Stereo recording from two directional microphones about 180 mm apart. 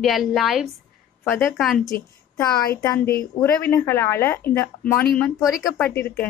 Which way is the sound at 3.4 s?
15° left (ahead or behind).